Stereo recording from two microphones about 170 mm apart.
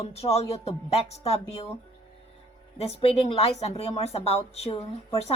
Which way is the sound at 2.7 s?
35° left (ahead or behind).